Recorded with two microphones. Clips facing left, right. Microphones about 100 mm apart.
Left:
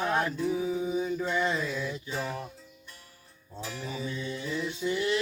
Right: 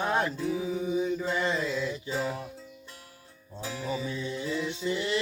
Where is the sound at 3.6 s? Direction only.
25° right (ahead or behind).